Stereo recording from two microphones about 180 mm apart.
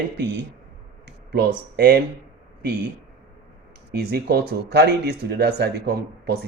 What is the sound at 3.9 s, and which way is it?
A man's voice, 65° right (ahead or behind).